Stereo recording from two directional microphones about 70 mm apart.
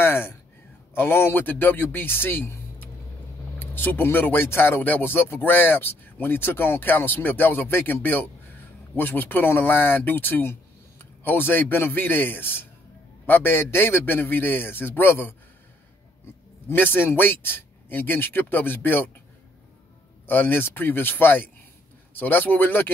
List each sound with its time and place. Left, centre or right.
0.0 s a sound: left
0.9 s a man's voice: left
16.6 s a man's voice: left
20.2 s a man's voice: left